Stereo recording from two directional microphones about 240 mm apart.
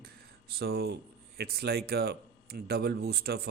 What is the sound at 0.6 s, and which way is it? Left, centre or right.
A man's voice, right.